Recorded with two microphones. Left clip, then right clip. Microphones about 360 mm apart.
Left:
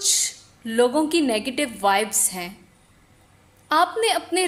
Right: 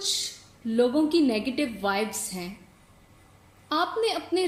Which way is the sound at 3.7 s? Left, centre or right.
Left.